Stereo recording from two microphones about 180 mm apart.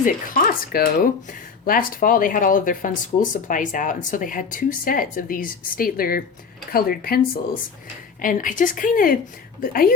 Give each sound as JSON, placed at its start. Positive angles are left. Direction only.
{"t": 0.0, "sound": "speech", "side_deg": 50}